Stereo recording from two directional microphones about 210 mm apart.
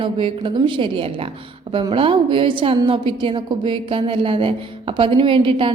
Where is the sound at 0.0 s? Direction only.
25° right (ahead or behind).